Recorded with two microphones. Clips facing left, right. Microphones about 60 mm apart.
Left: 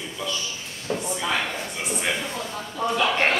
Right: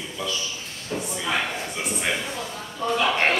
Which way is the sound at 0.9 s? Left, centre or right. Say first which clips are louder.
Left 2 dB; left.